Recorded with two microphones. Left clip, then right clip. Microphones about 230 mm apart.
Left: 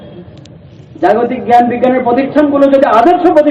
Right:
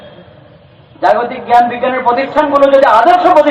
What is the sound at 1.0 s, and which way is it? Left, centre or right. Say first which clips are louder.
A man's voice: left 1 dB; centre.